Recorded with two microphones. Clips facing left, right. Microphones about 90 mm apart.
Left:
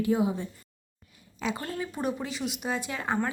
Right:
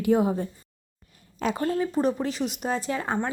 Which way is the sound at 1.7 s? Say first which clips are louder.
Right 7 dB; 30° right (ahead or behind).